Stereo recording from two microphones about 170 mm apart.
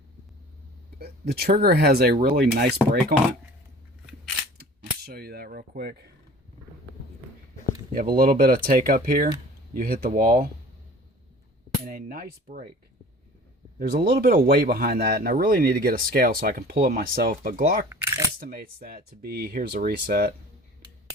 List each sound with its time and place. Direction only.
0.9 s speech: 65° right (ahead or behind)
5.0 s speech: 65° right (ahead or behind)
7.9 s speech: 60° right (ahead or behind)
11.9 s speech: 55° right (ahead or behind)
13.7 s speech: 60° right (ahead or behind)
17.8 s speech: 15° right (ahead or behind)
18.3 s speech: 60° right (ahead or behind)